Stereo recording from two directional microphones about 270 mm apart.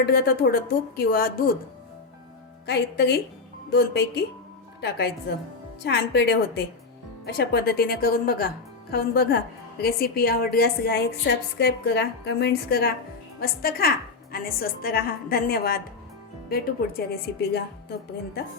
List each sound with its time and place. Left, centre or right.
0.0 s a woman's voice: left
2.6 s a woman's voice: left